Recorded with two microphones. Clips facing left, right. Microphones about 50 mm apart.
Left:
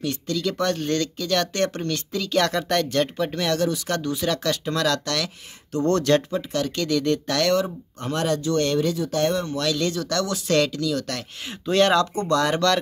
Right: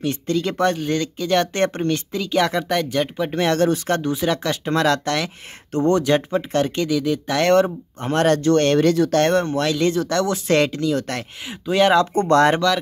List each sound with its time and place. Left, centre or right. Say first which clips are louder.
0.0 s speech: right 4 dB; right
0.7 s speech: right 2 dB; centre
2.2 s speech: right 2 dB; centre
3.3 s speech: right 7 dB; right
4.0 s speech: right 3 dB; right
5.9 s speech: right 2 dB; centre
6.3 s speech: right 5 dB; right
6.9 s speech: right 1 dB; centre
7.4 s speech: right 9 dB; right
9.6 s speech: right 5 dB; right
11.4 s speech: right 2 dB; centre
12.1 s speech: right 6 dB; right